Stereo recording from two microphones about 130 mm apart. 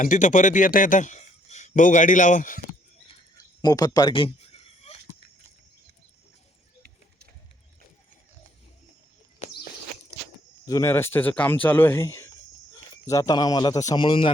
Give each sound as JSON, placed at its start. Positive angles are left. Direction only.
{"t": 0.0, "sound": "speech", "side_deg": 75}
{"t": 3.3, "sound": "a sound", "side_deg": 30}
{"t": 10.7, "sound": "a man's voice", "side_deg": 25}